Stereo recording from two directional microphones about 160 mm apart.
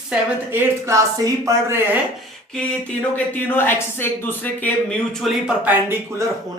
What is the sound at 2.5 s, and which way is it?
Speech, 5° left (ahead or behind).